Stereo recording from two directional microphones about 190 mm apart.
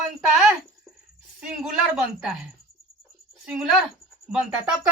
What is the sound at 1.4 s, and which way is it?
A woman's voice, 5° right (ahead or behind).